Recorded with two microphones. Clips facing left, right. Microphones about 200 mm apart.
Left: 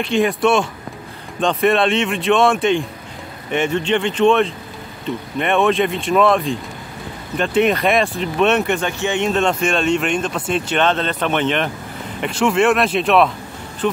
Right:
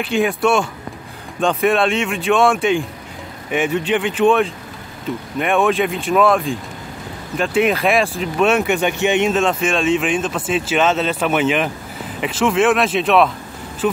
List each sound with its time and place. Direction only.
0.0 s speech: 5° right (ahead or behind)
8.8 s speech: 15° right (ahead or behind)
9.3 s speech: centre (ahead or behind)